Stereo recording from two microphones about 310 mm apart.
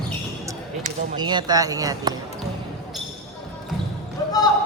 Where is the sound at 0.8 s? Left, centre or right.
Centre.